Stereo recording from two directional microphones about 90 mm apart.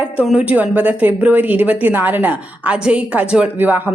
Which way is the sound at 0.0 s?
15° right (ahead or behind).